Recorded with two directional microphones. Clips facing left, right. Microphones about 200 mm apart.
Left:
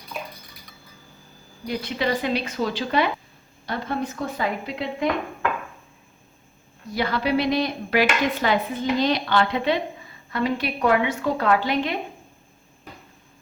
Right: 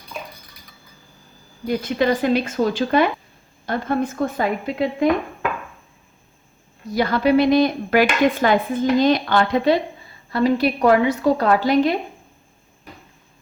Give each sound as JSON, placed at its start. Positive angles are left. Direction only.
{"t": 0.1, "sound": "a sound", "side_deg": 5}
{"t": 1.6, "sound": "speech", "side_deg": -45}
{"t": 6.9, "sound": "a woman's voice", "side_deg": -45}